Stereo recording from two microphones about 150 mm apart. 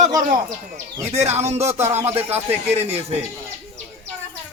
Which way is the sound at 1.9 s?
15° right (ahead or behind).